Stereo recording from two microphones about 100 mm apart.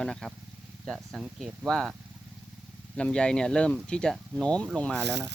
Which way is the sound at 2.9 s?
10° left (ahead or behind).